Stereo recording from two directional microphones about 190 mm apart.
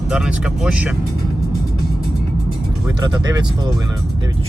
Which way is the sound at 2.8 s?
20° right (ahead or behind).